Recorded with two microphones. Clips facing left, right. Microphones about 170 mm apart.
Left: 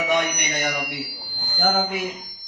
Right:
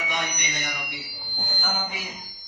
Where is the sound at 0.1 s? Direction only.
60° left (ahead or behind).